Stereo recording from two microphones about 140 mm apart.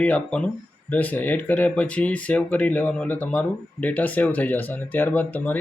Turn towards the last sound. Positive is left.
turn(degrees=10)  # may be behind; listen again after turning